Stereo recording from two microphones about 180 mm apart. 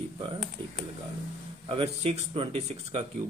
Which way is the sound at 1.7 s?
30° right (ahead or behind).